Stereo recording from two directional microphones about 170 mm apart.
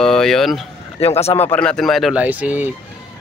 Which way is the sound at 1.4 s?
10° left (ahead or behind).